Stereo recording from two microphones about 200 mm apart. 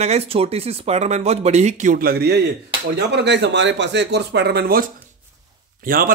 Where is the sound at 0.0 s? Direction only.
30° right (ahead or behind); by 4.8 s 50° right (ahead or behind).